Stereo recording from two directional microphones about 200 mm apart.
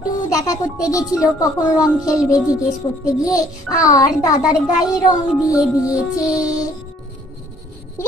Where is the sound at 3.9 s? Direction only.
15° left (ahead or behind).